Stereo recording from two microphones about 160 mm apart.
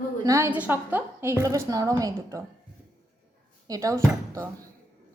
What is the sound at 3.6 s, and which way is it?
Speech, 20° right (ahead or behind).